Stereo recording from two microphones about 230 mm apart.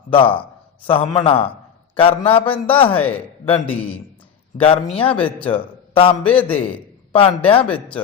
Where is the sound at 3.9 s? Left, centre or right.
Left.